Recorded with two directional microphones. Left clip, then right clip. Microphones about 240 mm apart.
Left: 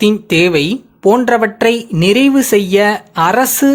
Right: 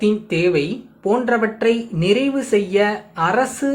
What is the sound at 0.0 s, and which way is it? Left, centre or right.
Speech, left.